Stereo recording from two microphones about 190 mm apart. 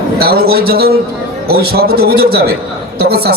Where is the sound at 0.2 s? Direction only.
55° right (ahead or behind).